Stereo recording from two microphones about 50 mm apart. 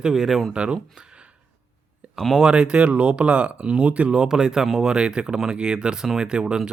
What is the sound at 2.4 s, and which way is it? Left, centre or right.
Speech, centre.